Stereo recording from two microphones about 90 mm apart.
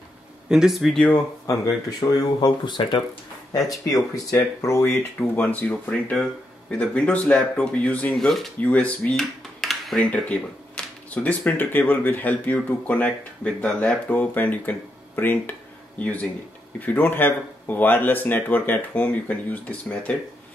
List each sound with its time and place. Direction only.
0.5 s speech: 5° right (ahead or behind)
2.0 s speech: 50° left (ahead or behind)
3.8 s speech: 40° left (ahead or behind)
5.3 s speech: 20° left (ahead or behind)
8.1 s speech: 5° left (ahead or behind)
8.5 s speech: 15° left (ahead or behind)
9.2 s a sound: centre (ahead or behind)
10.0 s speech: 15° left (ahead or behind)